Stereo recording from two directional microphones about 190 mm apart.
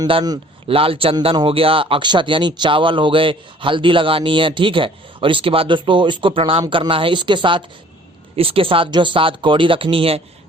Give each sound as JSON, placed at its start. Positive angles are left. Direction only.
{"t": 0.0, "sound": "speech", "side_deg": -25}